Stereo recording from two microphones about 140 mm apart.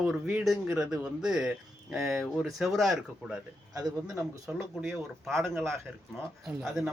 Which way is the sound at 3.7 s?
25° right (ahead or behind).